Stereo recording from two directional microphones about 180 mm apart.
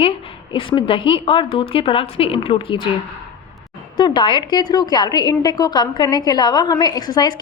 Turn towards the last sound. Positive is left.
turn(degrees=25)  # may be behind; listen again after turning